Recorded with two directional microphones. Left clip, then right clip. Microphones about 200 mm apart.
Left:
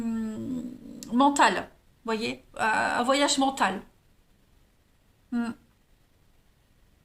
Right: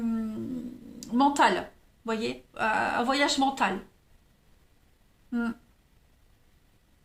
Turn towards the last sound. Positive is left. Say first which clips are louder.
# even
turn(degrees=20)  # may be behind; listen again after turning